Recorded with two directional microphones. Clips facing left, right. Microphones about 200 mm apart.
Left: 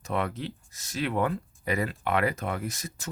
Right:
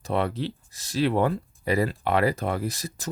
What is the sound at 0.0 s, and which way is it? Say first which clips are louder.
Speech: right 4 dB; 30° right (ahead or behind).